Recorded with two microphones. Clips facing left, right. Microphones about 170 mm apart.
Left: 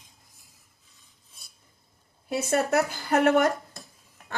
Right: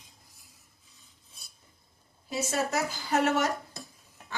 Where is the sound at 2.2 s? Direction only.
60° left (ahead or behind).